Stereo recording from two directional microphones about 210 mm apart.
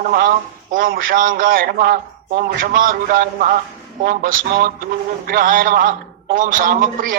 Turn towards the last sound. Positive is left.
turn(degrees=-40)  # may be behind; listen again after turning